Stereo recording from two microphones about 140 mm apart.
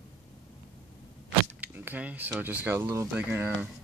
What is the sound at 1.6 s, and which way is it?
Speech, 15° right (ahead or behind).